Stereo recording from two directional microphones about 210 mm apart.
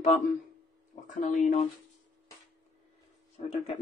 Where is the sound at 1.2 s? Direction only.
35° left (ahead or behind).